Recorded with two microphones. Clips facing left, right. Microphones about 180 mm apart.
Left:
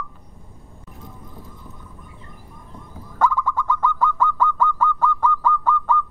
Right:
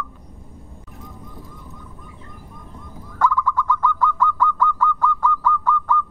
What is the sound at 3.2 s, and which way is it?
Bird, 20° left (ahead or behind).